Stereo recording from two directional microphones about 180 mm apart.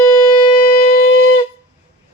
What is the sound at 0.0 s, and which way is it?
Shofar, 20° left (ahead or behind).